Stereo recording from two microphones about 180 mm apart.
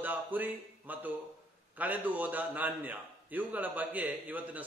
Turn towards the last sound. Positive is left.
turn(degrees=-10)  # may be behind; listen again after turning